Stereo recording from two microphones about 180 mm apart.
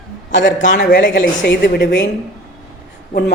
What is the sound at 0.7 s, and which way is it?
A woman's voice, 65° left (ahead or behind).